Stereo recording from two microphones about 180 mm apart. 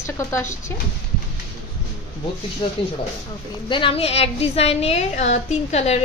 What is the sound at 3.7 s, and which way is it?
A woman's voice, 30° left (ahead or behind).